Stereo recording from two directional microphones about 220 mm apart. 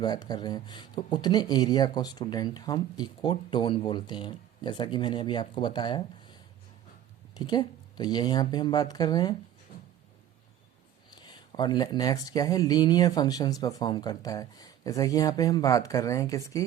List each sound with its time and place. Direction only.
0.0 s speech: 20° left (ahead or behind)
11.1 s speech: 20° left (ahead or behind)